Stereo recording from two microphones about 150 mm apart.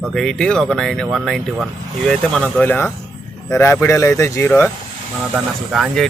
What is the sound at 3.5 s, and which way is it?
Mantra, 15° left (ahead or behind).